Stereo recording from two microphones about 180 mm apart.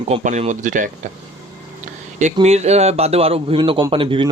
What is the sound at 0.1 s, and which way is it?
Speech, 40° right (ahead or behind).